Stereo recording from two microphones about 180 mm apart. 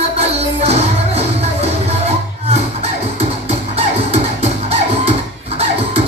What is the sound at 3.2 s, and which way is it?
Music, 35° right (ahead or behind).